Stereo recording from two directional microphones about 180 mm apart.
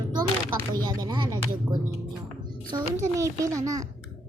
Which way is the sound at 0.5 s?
20° right (ahead or behind).